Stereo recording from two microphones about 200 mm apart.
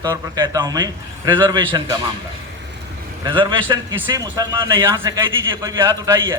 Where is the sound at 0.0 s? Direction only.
20° right (ahead or behind).